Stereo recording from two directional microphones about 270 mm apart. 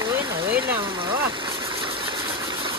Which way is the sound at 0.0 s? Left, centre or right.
Centre.